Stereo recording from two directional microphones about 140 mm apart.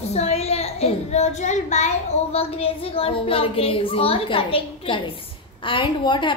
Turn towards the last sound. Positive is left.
turn(degrees=35)  # may be behind; listen again after turning